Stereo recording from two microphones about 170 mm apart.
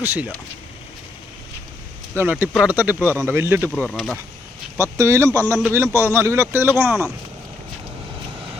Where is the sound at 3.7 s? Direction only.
5° left (ahead or behind).